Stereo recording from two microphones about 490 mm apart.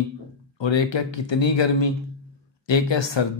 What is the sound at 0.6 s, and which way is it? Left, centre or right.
Speech, left.